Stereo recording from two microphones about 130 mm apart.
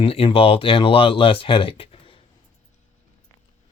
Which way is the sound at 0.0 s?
45° left (ahead or behind).